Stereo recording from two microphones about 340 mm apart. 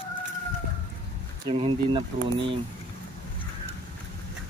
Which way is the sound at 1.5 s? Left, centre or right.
Centre.